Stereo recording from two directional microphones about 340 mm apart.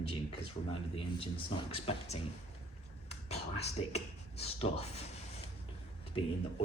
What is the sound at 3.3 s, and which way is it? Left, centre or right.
Speech, centre.